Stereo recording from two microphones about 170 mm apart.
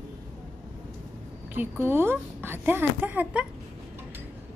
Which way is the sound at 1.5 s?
10° right (ahead or behind).